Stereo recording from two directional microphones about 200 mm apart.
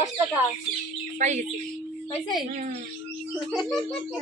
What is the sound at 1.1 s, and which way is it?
Speech, 35° right (ahead or behind).